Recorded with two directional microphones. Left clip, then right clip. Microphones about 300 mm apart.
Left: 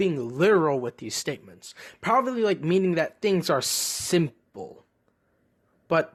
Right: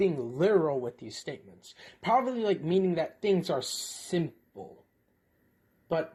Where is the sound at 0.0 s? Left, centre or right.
Left.